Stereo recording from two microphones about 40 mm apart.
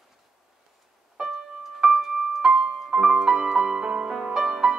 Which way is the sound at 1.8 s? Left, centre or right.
Centre.